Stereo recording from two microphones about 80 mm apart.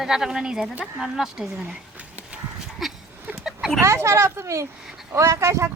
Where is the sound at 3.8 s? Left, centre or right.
Right.